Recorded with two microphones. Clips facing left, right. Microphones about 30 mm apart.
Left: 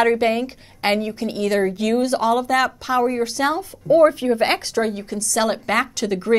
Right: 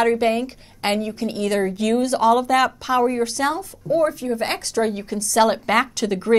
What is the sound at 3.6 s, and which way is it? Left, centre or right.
Speech, left.